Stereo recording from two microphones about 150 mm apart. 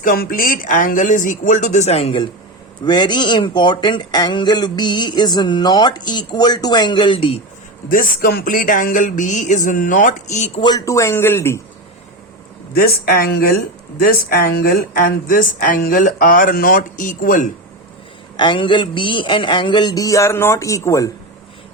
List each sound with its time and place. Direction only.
0.0 s speech: 75° left (ahead or behind); by 2.1 s 45° left (ahead or behind)
2.8 s speech: 30° left (ahead or behind)
7.9 s speech: 75° left (ahead or behind); by 10.6 s 50° left (ahead or behind)
10.6 s speech: 25° left (ahead or behind)
12.7 s speech: 85° left; by 17.4 s 60° left (ahead or behind)
18.3 s a sound: 30° left (ahead or behind)